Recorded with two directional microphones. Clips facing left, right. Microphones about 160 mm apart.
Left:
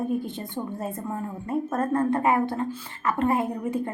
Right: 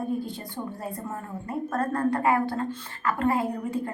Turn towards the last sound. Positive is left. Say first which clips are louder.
# left 1 dB
turn(degrees=20)  # may be behind; listen again after turning